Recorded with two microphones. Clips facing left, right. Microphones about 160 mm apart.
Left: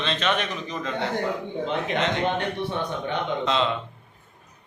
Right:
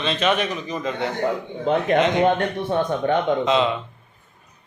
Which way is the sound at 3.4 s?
10° right (ahead or behind).